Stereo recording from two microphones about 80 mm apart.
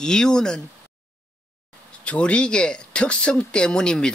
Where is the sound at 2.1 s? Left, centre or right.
Centre.